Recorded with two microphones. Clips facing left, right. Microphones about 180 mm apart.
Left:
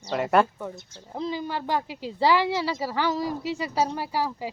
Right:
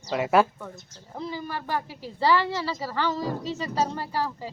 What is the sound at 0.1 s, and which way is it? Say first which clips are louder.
Speech: even; 5° right (ahead or behind).